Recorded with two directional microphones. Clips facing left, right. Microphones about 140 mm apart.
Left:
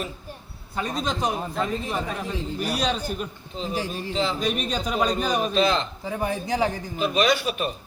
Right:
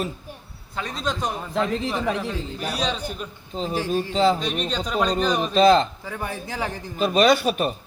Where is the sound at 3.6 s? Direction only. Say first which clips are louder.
Right 5 dB; 40° right (ahead or behind).